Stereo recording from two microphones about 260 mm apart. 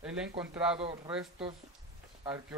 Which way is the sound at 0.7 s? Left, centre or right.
Right.